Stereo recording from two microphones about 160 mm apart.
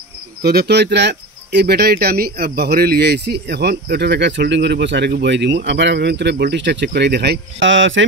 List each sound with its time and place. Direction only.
0.4 s cricket: 75° right (ahead or behind); by 7.3 s 90° right